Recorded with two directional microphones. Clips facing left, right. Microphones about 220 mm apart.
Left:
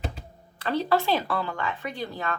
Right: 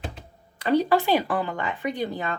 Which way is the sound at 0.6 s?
15° right (ahead or behind).